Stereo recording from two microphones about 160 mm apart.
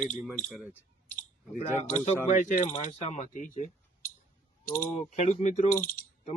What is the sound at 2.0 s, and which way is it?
Speech, 50° left (ahead or behind).